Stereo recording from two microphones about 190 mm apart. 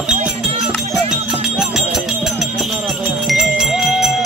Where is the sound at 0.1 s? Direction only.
40° right (ahead or behind).